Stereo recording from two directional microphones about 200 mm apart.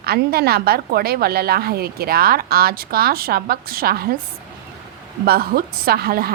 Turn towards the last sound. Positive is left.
turn(degrees=-50)  # may be behind; listen again after turning